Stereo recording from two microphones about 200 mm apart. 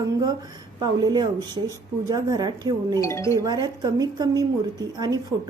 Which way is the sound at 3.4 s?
20° right (ahead or behind).